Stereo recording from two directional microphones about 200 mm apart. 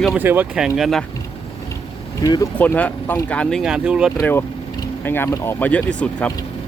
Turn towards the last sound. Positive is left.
turn(degrees=5)  # may be behind; listen again after turning